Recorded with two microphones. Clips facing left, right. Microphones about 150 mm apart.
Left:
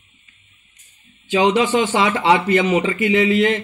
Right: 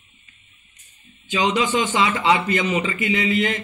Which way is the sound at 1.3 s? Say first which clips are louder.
Left 5 dB; 60° left (ahead or behind).